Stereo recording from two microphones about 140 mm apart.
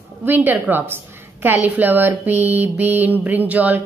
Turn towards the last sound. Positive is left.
turn(degrees=-10)  # may be behind; listen again after turning